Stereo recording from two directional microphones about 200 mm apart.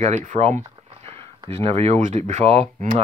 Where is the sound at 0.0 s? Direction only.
35° right (ahead or behind).